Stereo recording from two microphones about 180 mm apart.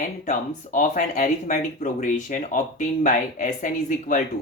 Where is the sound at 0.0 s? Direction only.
45° left (ahead or behind).